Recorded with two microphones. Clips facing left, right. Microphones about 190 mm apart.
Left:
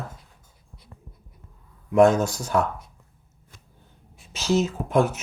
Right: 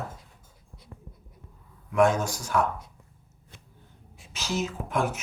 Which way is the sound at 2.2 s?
25° left (ahead or behind).